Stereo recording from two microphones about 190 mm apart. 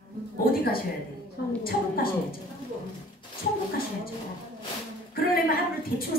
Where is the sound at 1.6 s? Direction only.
50° left (ahead or behind).